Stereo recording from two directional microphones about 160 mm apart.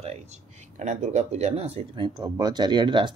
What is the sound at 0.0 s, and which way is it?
Speech, 45° right (ahead or behind).